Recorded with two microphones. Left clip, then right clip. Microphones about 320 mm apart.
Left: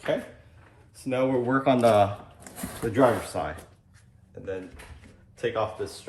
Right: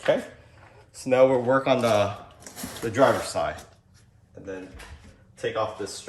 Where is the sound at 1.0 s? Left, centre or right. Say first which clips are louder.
Right 7 dB; centre.